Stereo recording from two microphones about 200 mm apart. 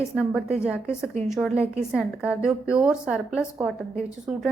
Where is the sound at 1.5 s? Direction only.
30° right (ahead or behind).